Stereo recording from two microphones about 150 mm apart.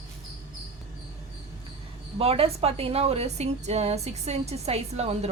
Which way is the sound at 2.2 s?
40° right (ahead or behind).